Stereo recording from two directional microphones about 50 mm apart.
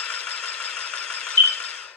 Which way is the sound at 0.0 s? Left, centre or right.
Left.